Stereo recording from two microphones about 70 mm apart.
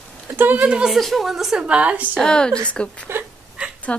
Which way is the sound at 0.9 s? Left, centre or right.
Centre.